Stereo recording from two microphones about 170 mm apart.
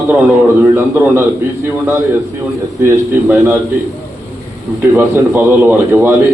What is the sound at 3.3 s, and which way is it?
Speech, 5° right (ahead or behind).